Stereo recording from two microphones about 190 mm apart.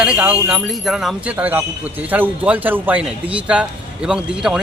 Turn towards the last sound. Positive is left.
turn(degrees=-5)  # may be behind; listen again after turning